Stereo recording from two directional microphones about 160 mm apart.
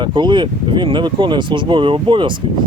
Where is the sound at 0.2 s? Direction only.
30° right (ahead or behind).